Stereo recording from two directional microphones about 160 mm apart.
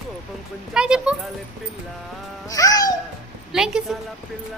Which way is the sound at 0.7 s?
5° right (ahead or behind).